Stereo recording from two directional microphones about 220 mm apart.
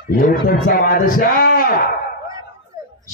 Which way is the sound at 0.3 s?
40° left (ahead or behind).